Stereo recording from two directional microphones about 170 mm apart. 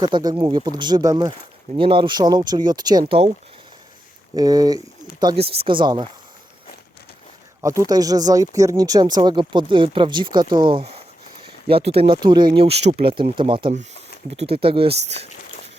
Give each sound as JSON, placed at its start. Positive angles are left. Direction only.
{"t": 0.0, "sound": "speech", "side_deg": -25}
{"t": 4.4, "sound": "speech", "side_deg": -20}
{"t": 5.4, "sound": "speech", "side_deg": -35}
{"t": 7.6, "sound": "speech", "side_deg": -20}